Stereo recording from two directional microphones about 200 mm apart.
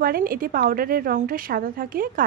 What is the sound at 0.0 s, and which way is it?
A woman's voice, 45° right (ahead or behind).